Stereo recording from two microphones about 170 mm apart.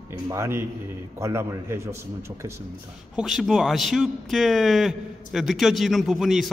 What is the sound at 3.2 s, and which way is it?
A man's voice, centre (ahead or behind).